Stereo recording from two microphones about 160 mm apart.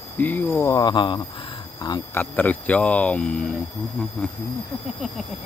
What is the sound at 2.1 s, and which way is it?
Speech, 10° left (ahead or behind).